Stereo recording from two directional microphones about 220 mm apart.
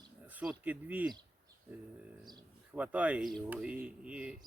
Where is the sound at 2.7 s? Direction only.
5° right (ahead or behind).